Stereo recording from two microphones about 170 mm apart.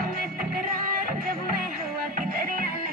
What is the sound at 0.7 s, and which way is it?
Music, 60° right (ahead or behind).